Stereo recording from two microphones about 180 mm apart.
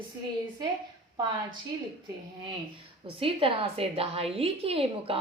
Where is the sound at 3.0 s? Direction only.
30° right (ahead or behind).